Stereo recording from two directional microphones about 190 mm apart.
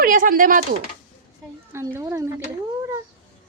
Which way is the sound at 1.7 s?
15° right (ahead or behind).